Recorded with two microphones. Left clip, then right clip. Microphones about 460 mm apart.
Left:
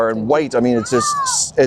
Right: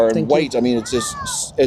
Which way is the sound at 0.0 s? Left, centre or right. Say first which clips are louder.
Right 1 dB; left.